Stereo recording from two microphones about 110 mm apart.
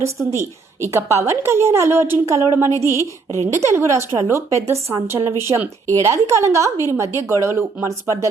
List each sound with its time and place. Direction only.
0.0 s a woman's voice: 25° right (ahead or behind)
2.9 s a woman's voice: 30° left (ahead or behind)
3.5 s a woman's voice: 25° right (ahead or behind)